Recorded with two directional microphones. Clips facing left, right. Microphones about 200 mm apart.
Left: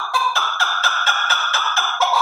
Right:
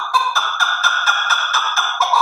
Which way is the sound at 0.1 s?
30° left (ahead or behind).